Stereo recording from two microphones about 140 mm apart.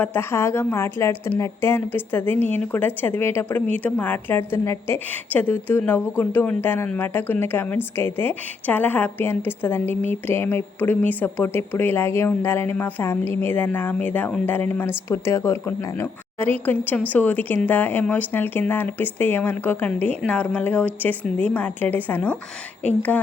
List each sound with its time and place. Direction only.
0.0 s a woman's voice: 15° left (ahead or behind)